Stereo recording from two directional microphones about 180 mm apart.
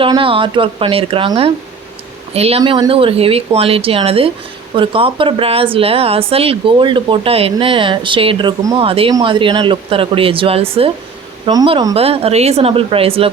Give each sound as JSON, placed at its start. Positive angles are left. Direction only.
{"t": 0.0, "sound": "a woman's voice", "side_deg": -30}